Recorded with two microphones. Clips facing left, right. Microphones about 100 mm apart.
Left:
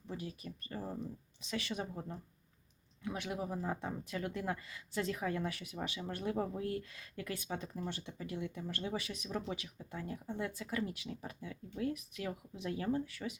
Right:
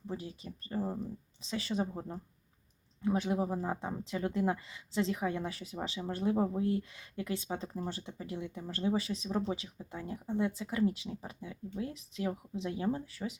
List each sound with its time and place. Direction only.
0.1 s speech: 25° right (ahead or behind)